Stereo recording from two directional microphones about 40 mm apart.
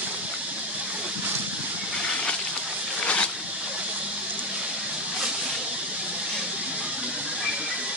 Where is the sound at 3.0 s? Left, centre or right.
Left.